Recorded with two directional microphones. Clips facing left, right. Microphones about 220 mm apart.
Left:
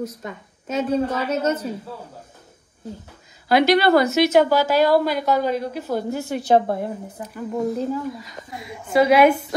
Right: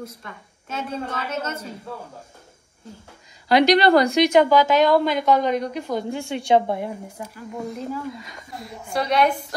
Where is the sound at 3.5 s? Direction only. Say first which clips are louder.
Even; 5° left (ahead or behind).